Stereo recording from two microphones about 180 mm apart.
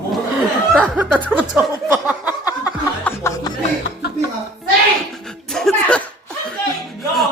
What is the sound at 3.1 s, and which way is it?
Music, 15° left (ahead or behind).